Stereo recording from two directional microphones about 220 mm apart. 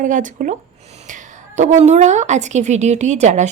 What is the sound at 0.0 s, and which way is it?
Speech, 35° right (ahead or behind).